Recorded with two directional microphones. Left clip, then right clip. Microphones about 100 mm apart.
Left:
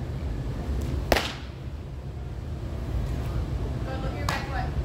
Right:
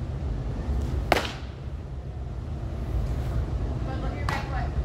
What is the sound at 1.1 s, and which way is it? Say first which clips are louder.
Whip: even; 20° right (ahead or behind).